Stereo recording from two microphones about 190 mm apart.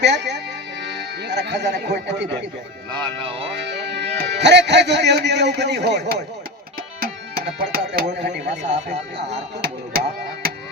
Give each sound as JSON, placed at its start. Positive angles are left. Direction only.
{"t": 0.0, "sound": "speech", "side_deg": -65}
{"t": 2.9, "sound": "speech", "side_deg": -30}
{"t": 3.8, "sound": "a man's voice", "side_deg": -65}
{"t": 7.6, "sound": "speech", "side_deg": -50}
{"t": 8.4, "sound": "speech", "side_deg": -40}
{"t": 9.1, "sound": "music", "side_deg": -65}